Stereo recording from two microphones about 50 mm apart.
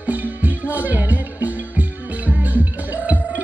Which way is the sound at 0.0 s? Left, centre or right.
Right.